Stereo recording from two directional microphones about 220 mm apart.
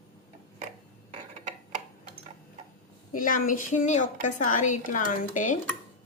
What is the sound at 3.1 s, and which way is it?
A woman's voice, 40° left (ahead or behind).